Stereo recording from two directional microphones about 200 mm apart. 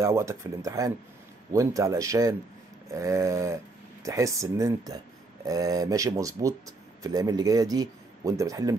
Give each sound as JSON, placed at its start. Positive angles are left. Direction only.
{"t": 0.0, "sound": "speech", "side_deg": -15}